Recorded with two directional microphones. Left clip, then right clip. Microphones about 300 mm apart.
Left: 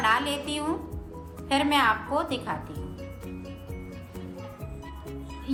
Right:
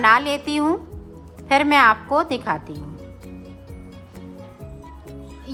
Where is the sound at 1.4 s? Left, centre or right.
Centre.